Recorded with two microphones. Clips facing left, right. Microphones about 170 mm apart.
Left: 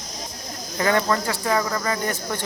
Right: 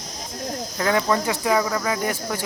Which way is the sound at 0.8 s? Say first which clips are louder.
Even; 5° right (ahead or behind).